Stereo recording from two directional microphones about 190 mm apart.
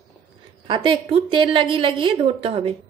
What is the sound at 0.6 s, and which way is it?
A woman's voice, 25° right (ahead or behind).